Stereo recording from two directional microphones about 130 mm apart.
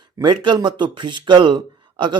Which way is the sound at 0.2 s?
35° right (ahead or behind).